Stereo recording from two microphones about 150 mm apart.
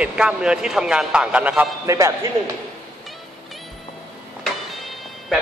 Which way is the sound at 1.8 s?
20° right (ahead or behind).